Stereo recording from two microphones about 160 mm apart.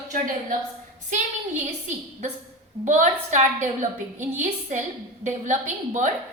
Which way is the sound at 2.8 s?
50° right (ahead or behind).